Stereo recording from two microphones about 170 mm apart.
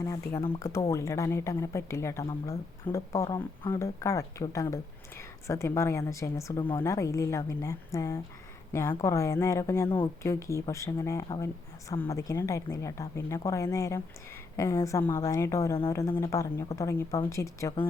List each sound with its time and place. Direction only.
0.0 s speech: 15° left (ahead or behind)
6.6 s speech: 30° left (ahead or behind)
6.8 s speech: 20° left (ahead or behind)